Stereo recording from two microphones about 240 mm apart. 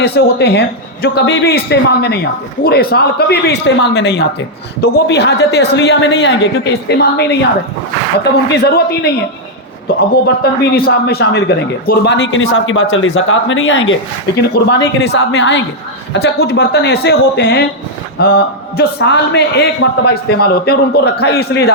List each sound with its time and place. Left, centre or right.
0.0 s a man's voice: left
10.4 s a man's voice: left